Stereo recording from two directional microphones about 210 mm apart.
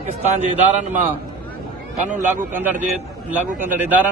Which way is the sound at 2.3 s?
10° right (ahead or behind).